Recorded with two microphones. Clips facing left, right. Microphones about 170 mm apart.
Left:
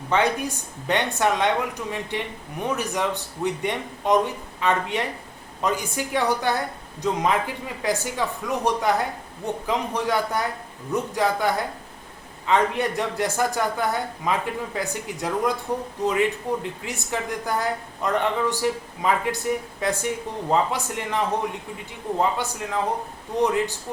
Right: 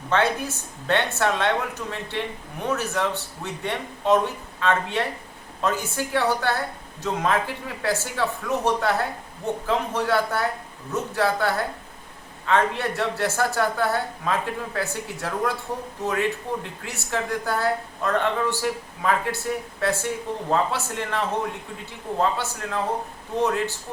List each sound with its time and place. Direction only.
0.1 s speech: 15° left (ahead or behind)
22.2 s speech: 15° left (ahead or behind)